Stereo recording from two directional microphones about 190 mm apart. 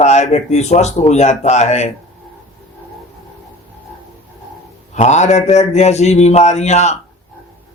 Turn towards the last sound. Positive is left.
turn(degrees=35)  # may be behind; listen again after turning